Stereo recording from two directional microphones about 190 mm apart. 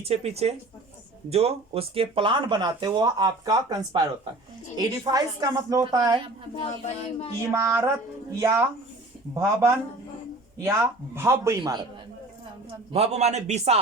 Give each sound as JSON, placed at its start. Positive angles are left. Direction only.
{"t": 0.0, "sound": "a man's voice", "side_deg": -35}
{"t": 6.6, "sound": "speech", "side_deg": 35}
{"t": 7.5, "sound": "speech", "side_deg": -10}
{"t": 12.9, "sound": "a man's voice", "side_deg": -35}